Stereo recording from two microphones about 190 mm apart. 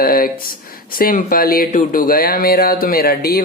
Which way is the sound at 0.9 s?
50° left (ahead or behind).